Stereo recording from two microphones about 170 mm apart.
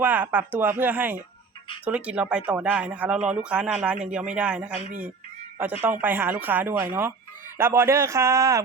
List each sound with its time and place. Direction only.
0.0 s speech: 10° right (ahead or behind)